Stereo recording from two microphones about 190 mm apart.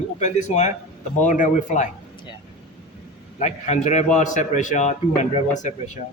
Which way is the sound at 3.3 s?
35° left (ahead or behind).